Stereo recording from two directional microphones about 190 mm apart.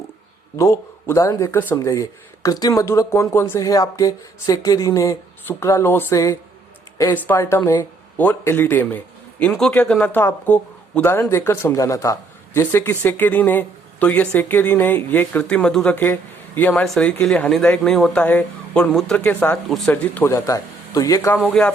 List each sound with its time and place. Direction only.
0.5 s speech: 15° left (ahead or behind)